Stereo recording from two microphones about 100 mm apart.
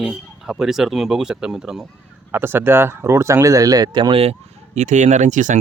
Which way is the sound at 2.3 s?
20° right (ahead or behind).